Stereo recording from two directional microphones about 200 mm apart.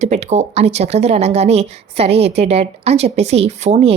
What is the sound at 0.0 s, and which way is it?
A woman's voice, 35° right (ahead or behind).